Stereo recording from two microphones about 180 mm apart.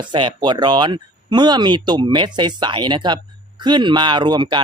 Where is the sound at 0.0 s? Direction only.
25° right (ahead or behind).